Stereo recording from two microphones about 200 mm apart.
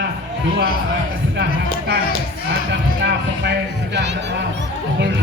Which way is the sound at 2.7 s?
60° right (ahead or behind).